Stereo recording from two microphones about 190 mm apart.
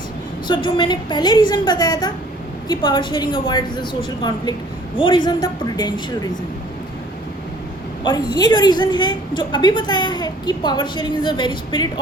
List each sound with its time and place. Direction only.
0.4 s a woman's voice: 25° left (ahead or behind)
8.0 s a woman's voice: 20° left (ahead or behind)